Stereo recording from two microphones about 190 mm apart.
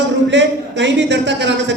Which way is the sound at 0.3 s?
70° right (ahead or behind).